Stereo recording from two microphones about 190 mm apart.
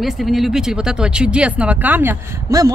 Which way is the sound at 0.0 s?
Centre (ahead or behind).